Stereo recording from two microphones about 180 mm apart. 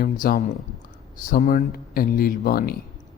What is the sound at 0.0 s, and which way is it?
A man's voice, 50° left (ahead or behind).